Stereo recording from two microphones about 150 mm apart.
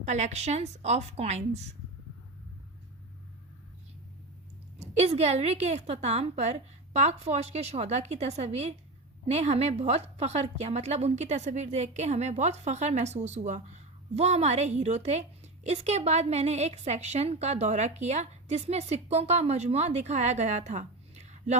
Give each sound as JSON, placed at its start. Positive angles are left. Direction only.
{"t": 0.0, "sound": "a woman's voice", "side_deg": -50}
{"t": 4.8, "sound": "a woman's voice", "side_deg": -45}